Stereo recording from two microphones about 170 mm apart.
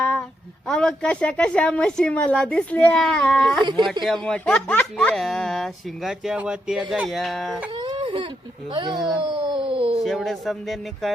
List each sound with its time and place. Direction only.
0.0 s a sound: 5° left (ahead or behind)
0.7 s a woman's voice: 5° left (ahead or behind)
3.6 s speech: 25° right (ahead or behind)
4.0 s speech: centre (ahead or behind)
7.8 s baby cry: 30° right (ahead or behind)
8.7 s speech: 25° right (ahead or behind)
10.0 s speech: centre (ahead or behind)